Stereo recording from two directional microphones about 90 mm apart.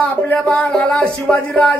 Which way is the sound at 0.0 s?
15° left (ahead or behind).